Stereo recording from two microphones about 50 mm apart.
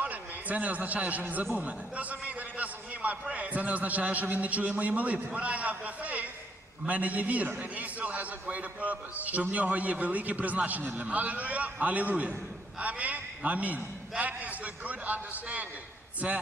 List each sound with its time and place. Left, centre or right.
0.0 s a man's voice: right